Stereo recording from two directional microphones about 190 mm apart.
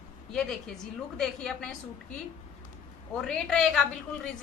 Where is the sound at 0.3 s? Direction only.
5° left (ahead or behind).